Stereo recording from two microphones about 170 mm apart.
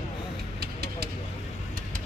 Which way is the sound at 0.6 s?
65° right (ahead or behind).